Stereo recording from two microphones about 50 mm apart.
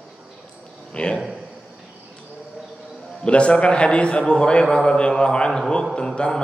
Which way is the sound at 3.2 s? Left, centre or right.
Left.